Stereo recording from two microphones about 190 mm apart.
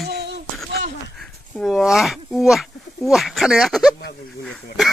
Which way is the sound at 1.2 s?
Centre (ahead or behind).